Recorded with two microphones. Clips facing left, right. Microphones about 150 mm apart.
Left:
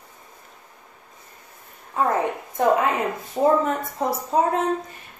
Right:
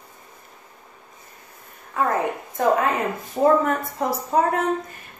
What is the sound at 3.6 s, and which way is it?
A woman's voice, 25° left (ahead or behind).